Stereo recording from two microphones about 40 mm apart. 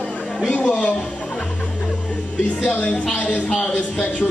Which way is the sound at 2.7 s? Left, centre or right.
Left.